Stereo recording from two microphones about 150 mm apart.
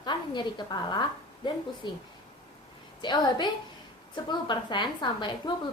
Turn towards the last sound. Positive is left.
turn(degrees=30)  # may be behind; listen again after turning